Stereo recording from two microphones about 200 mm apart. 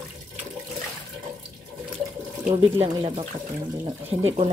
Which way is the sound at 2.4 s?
30° right (ahead or behind).